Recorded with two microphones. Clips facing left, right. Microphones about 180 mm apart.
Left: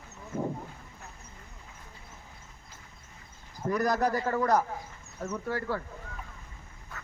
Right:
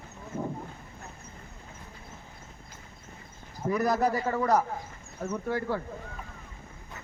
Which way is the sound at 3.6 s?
10° right (ahead or behind).